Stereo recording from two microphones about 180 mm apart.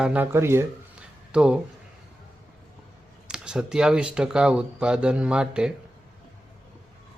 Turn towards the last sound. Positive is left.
turn(degrees=-5)  # may be behind; listen again after turning